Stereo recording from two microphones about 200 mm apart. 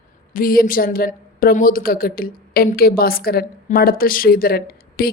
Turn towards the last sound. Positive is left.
turn(degrees=50)  # may be behind; listen again after turning